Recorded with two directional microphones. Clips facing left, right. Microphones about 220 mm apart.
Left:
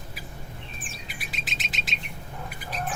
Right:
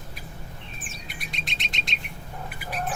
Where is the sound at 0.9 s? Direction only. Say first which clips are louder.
Even; 5° left (ahead or behind).